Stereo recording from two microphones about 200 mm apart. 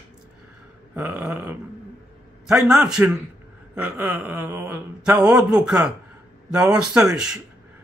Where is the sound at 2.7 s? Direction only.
5° right (ahead or behind).